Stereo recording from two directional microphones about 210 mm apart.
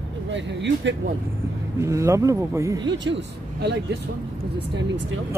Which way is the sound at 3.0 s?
55° right (ahead or behind).